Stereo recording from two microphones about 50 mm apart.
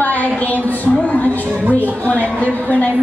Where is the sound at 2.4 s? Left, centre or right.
Left.